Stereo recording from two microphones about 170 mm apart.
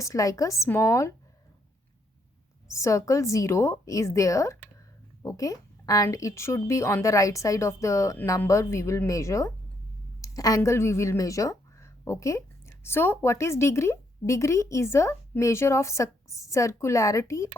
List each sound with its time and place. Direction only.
0.0 s a woman's voice: 20° left (ahead or behind)
2.7 s a woman's voice: 20° left (ahead or behind)